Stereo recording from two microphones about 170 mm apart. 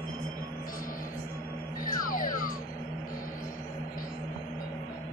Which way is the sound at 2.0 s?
55° left (ahead or behind).